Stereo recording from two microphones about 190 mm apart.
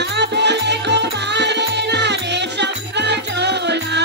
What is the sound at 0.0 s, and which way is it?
Music, 65° right (ahead or behind).